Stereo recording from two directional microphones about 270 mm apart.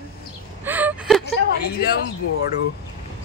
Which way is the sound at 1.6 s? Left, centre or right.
Left.